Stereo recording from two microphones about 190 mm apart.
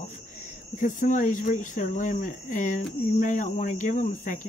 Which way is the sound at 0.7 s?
45° left (ahead or behind).